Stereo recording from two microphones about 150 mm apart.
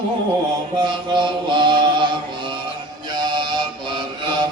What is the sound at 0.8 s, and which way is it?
Mantra, 30° right (ahead or behind).